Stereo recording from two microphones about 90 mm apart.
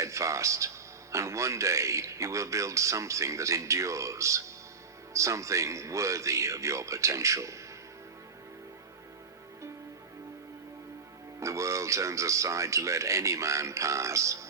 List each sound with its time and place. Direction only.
0.0 s a man's voice: 35° right (ahead or behind)
11.3 s a man's voice: 35° right (ahead or behind)